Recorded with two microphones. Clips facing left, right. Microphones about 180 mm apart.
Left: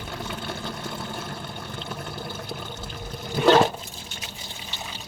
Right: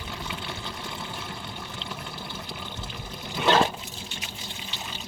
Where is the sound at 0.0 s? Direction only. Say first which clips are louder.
Left 3 dB; 50° left (ahead or behind).